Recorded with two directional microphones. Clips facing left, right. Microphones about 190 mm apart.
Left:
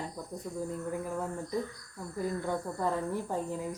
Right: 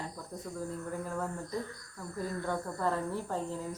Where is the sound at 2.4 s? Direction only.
15° left (ahead or behind).